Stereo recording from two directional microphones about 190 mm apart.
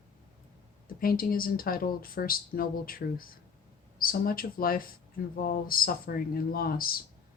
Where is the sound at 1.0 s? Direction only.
50° left (ahead or behind).